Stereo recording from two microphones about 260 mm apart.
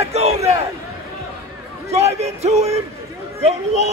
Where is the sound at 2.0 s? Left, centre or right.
Right.